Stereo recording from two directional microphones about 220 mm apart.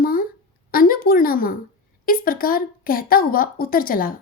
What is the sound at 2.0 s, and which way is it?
A woman's voice, 40° left (ahead or behind).